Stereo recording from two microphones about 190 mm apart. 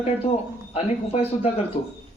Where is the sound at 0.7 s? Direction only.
30° left (ahead or behind).